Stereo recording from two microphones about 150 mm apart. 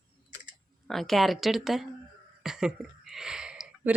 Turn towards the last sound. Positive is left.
turn(degrees=-10)  # may be behind; listen again after turning